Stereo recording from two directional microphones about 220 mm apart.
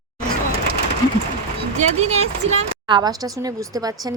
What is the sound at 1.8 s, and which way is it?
Speech, 30° right (ahead or behind).